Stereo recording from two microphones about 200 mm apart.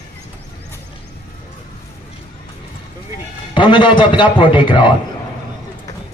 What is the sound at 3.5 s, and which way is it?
A man's voice, 25° left (ahead or behind).